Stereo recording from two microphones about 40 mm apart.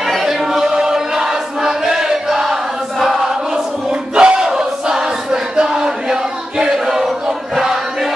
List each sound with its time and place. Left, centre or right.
0.2 s chant: centre
4.1 s battle cry: right
4.5 s a sound: centre